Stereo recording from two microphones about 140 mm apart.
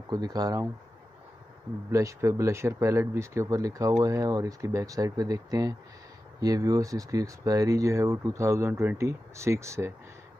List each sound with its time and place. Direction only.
0.1 s speech: 25° right (ahead or behind)
1.9 s speech: 20° right (ahead or behind)